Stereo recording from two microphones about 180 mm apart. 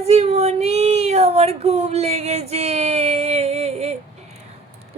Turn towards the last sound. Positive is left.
turn(degrees=-35)  # may be behind; listen again after turning